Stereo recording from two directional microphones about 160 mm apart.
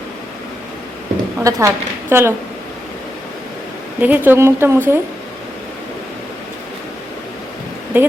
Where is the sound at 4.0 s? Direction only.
10° right (ahead or behind).